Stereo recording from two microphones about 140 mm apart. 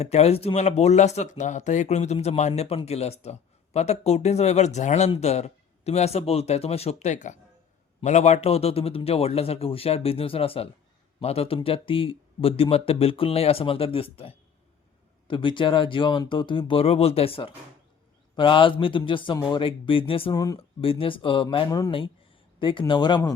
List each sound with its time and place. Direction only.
0.0 s a man's voice: 50° left (ahead or behind)
20.3 s speech: 25° left (ahead or behind)
20.6 s speech: 40° left (ahead or behind)